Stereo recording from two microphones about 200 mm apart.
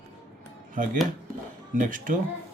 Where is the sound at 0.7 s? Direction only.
40° right (ahead or behind).